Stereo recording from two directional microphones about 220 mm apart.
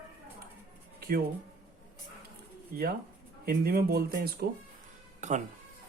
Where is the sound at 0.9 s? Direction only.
45° right (ahead or behind).